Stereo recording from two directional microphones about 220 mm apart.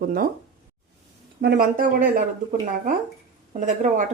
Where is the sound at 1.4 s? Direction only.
45° right (ahead or behind).